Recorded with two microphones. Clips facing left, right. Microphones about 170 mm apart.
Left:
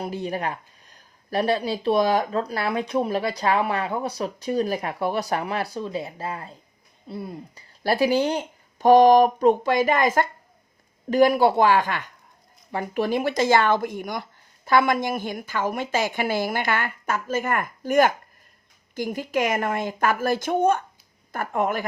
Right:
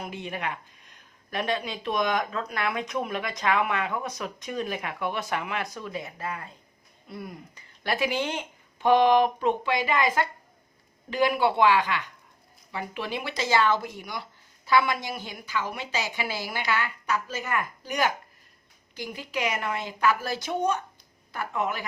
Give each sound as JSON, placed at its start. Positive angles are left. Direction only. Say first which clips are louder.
{"t": 0.0, "sound": "speech", "louder": "left 6 dB", "side_deg": 35}